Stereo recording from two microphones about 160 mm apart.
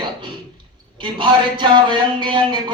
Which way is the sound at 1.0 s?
30° right (ahead or behind).